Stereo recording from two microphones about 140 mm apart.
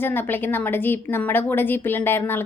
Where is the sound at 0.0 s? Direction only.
15° left (ahead or behind).